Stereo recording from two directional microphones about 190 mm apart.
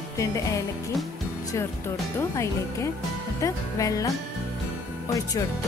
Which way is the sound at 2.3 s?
15° left (ahead or behind).